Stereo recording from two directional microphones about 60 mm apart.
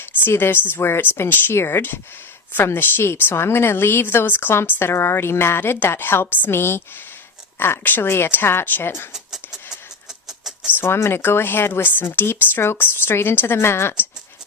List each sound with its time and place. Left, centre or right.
0.0 s speech: left
9.1 s a sound: centre
10.8 s speech: left